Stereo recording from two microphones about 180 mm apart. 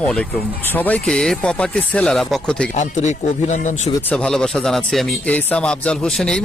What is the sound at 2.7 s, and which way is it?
Speech, 40° left (ahead or behind).